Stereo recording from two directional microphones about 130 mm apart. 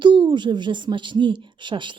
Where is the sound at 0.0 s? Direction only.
40° right (ahead or behind).